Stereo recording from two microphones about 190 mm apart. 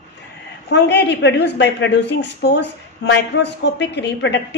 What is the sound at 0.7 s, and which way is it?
A woman's voice, 65° left (ahead or behind).